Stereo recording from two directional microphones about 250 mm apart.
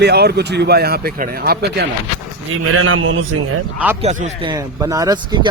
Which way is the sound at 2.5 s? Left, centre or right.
Right.